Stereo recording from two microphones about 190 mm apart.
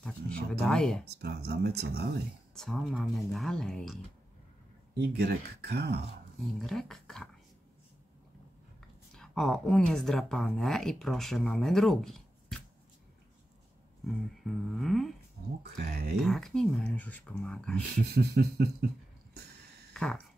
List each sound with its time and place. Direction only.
0.5 s a woman's voice: 5° left (ahead or behind)
1.2 s speech: 60° right (ahead or behind)
2.5 s a woman's voice: centre (ahead or behind)
4.9 s speech: 60° right (ahead or behind)
6.4 s a woman's voice: centre (ahead or behind)
9.1 s a woman's voice: 5° left (ahead or behind)
14.4 s a woman's voice: centre (ahead or behind)
15.8 s speech: 55° right (ahead or behind)
16.2 s a woman's voice: centre (ahead or behind)
18.1 s speech: 55° right (ahead or behind)
19.9 s a sound: 5° left (ahead or behind)